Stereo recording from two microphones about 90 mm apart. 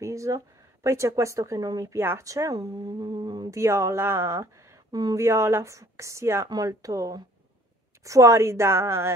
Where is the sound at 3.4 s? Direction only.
35° right (ahead or behind).